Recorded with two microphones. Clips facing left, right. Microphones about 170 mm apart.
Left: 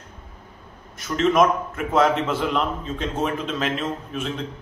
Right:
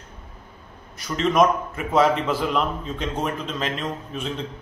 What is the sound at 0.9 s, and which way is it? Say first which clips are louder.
A man's voice: left 1 dB; centre (ahead or behind).